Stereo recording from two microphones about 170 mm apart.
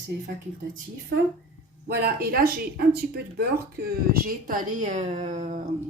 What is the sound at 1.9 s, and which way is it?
A woman's voice, 70° right (ahead or behind).